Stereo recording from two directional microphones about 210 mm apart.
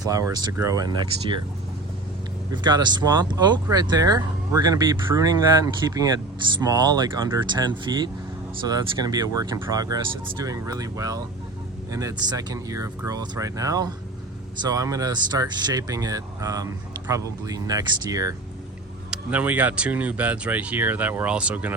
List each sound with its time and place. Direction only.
0.0 s speech: 15° right (ahead or behind)
2.5 s speech: 20° right (ahead or behind)